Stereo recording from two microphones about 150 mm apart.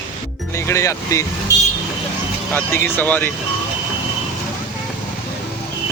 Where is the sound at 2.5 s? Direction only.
15° left (ahead or behind).